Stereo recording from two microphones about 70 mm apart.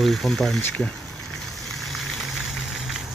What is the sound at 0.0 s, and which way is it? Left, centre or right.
Speech, centre.